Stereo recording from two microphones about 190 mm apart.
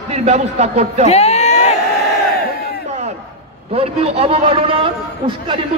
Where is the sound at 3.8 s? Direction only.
30° right (ahead or behind).